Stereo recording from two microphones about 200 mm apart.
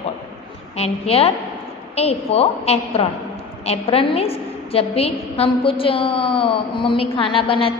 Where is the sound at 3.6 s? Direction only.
30° left (ahead or behind).